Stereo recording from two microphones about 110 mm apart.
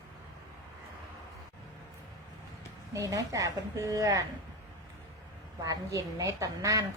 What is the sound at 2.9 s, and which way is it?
A woman's voice, 30° right (ahead or behind).